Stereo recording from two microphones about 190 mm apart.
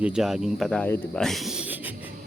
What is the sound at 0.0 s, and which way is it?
Speech, 5° right (ahead or behind).